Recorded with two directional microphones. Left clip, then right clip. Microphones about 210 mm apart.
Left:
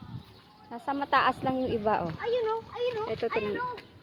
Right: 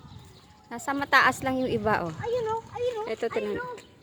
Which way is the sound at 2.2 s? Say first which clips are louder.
Even; 35° left (ahead or behind).